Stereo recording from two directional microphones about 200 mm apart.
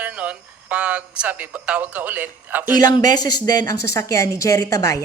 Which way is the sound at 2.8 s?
20° left (ahead or behind).